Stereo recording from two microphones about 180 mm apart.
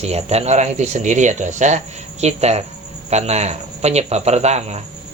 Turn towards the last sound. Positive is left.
turn(degrees=-35)  # may be behind; listen again after turning